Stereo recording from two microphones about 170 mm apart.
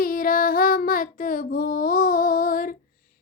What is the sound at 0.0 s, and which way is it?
Child singing, 55° left (ahead or behind).